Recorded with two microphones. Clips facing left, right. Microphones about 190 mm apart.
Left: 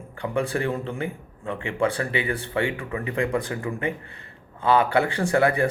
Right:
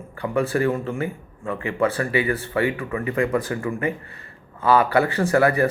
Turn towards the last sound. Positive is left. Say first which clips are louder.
# right 2 dB
turn(degrees=15)  # may be behind; listen again after turning